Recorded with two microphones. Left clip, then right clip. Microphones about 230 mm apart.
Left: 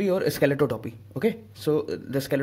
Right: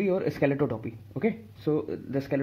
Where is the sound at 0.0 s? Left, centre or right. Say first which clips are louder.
Left 3 dB; left.